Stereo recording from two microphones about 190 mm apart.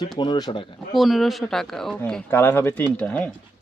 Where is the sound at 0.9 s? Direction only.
Centre (ahead or behind).